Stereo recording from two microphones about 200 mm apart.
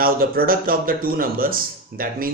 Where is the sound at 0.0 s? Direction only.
45° right (ahead or behind).